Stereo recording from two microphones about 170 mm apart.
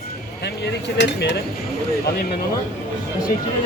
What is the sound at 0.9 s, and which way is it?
Speech, 90° left.